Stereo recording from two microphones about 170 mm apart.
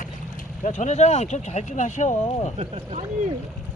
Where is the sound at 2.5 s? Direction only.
35° right (ahead or behind).